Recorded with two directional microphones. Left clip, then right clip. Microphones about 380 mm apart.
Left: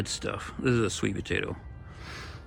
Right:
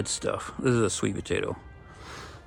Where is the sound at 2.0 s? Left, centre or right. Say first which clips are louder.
Even; centre.